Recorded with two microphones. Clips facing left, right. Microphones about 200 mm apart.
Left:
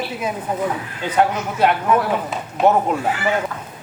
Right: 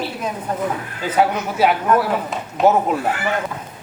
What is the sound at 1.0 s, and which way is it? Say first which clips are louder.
Speech: even; 5° right (ahead or behind).